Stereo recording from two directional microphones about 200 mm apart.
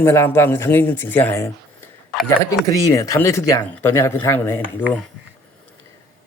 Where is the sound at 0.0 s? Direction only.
10° left (ahead or behind).